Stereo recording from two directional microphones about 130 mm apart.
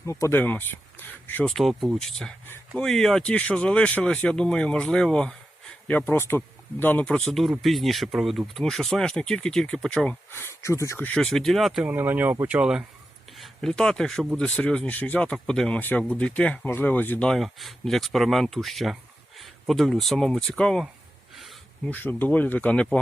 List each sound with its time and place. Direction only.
0.0 s speech: 20° left (ahead or behind)
1.5 s speech: centre (ahead or behind)
10.3 s speech: 20° left (ahead or behind)
11.1 s speech: 5° left (ahead or behind)
11.9 s speech: 15° right (ahead or behind)
13.3 s speech: centre (ahead or behind)